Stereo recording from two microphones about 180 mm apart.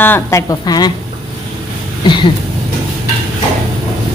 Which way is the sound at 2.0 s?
25° left (ahead or behind).